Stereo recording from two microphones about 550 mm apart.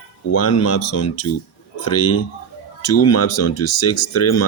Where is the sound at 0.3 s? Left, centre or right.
Left.